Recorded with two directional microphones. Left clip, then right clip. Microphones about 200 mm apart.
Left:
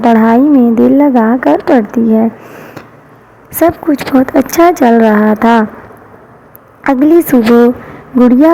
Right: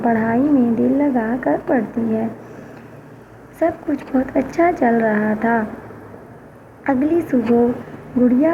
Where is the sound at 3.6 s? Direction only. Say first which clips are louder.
Left 10 dB; 45° left (ahead or behind).